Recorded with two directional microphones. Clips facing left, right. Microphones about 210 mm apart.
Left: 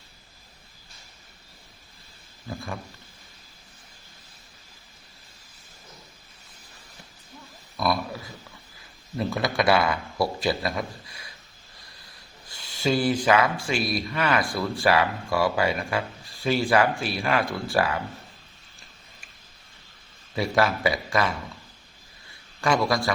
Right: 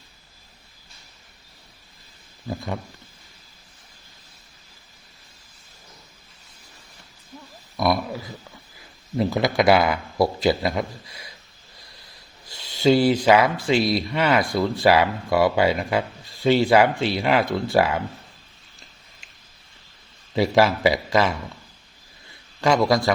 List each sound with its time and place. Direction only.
9.1 s speech: 25° right (ahead or behind)
12.5 s speech: 20° right (ahead or behind)
20.3 s speech: 25° right (ahead or behind)
22.6 s speech: 20° right (ahead or behind)